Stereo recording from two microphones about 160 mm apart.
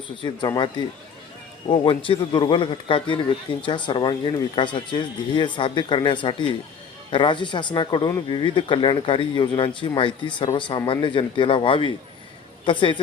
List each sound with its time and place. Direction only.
0.2 s a man's voice: 25° left (ahead or behind)